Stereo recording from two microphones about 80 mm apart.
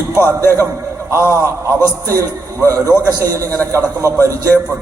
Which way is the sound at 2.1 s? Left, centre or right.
Right.